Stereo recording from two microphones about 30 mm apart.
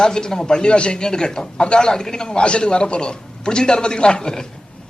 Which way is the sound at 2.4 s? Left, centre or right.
Left.